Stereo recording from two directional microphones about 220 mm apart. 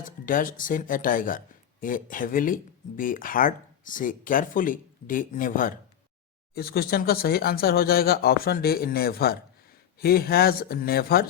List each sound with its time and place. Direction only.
0.3 s speech: 40° left (ahead or behind)